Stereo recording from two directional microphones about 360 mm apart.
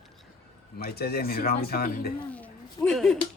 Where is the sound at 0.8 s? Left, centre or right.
Left.